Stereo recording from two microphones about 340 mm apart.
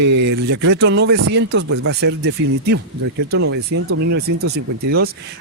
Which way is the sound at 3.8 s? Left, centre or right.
Right.